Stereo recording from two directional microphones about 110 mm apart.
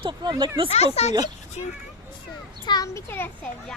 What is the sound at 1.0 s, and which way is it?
Speech, 70° left (ahead or behind).